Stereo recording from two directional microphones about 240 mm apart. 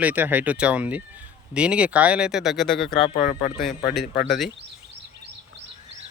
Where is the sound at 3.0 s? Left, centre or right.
Left.